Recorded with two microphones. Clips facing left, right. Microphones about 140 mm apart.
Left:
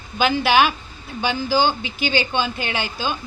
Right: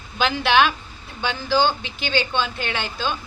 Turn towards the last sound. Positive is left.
turn(degrees=10)  # may be behind; listen again after turning